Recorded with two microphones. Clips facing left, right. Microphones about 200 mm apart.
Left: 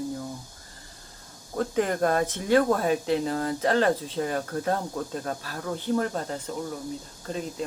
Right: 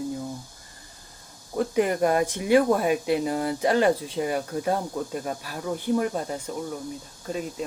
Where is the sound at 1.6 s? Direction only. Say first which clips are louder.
Right 2 dB; 10° right (ahead or behind).